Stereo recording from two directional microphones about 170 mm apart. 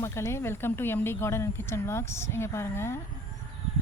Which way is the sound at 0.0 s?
15° left (ahead or behind).